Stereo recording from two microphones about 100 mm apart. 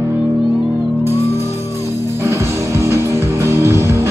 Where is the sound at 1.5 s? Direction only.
25° right (ahead or behind).